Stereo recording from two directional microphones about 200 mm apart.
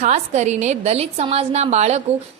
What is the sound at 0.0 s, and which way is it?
A woman's voice, 35° right (ahead or behind).